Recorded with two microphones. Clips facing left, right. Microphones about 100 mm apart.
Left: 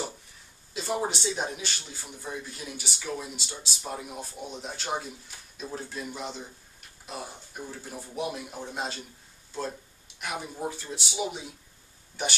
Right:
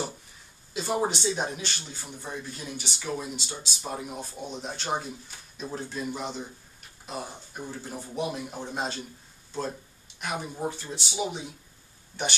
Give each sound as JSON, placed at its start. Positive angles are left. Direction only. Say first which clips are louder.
{"t": 0.7, "sound": "speech", "louder": "right 2 dB", "side_deg": -5}